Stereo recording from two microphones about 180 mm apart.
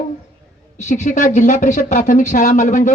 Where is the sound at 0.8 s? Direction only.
40° left (ahead or behind).